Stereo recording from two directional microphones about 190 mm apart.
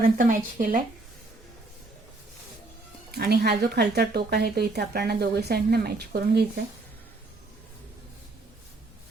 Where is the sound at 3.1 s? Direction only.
55° right (ahead or behind).